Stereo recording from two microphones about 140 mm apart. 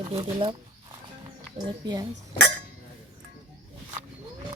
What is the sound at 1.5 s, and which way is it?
Speech, 30° right (ahead or behind).